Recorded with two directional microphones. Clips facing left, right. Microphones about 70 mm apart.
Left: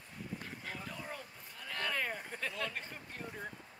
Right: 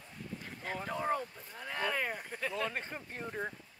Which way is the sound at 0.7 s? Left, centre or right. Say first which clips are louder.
Right 16 dB; right.